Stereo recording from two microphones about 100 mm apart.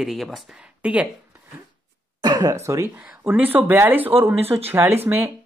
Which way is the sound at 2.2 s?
40° right (ahead or behind).